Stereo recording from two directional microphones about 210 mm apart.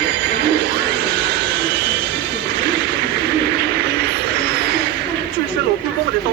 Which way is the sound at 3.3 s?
50° right (ahead or behind).